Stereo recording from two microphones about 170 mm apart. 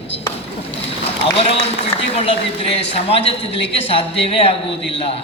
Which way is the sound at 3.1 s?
35° left (ahead or behind).